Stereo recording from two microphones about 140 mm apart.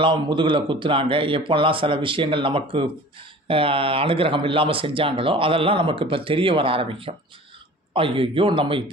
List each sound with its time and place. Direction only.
0.0 s speech: 35° right (ahead or behind)